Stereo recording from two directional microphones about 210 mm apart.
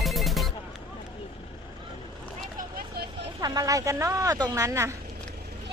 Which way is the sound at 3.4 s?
15° right (ahead or behind).